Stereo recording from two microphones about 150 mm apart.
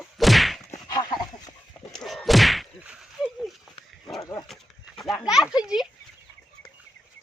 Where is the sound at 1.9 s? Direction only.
Centre (ahead or behind).